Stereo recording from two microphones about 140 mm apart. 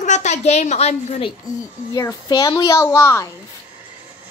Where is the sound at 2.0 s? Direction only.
25° left (ahead or behind).